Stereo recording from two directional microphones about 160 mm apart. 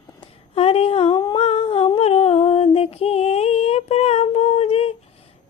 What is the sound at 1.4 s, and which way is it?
Humming, 40° left (ahead or behind).